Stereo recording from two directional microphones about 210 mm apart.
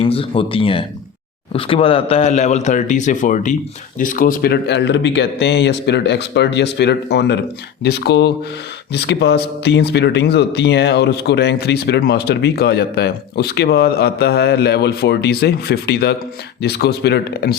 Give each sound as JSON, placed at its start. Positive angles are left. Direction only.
{"t": 0.0, "sound": "speech", "side_deg": 25}